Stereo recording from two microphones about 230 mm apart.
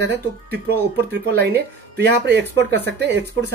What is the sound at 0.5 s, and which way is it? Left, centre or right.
Speech, right.